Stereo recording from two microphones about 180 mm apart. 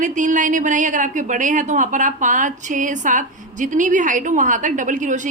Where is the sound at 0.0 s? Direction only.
45° right (ahead or behind).